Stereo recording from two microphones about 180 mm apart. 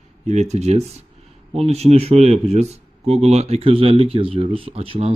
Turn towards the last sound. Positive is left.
turn(degrees=-30)  # may be behind; listen again after turning